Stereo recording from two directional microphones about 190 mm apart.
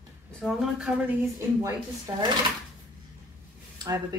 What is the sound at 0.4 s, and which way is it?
Speech, centre (ahead or behind).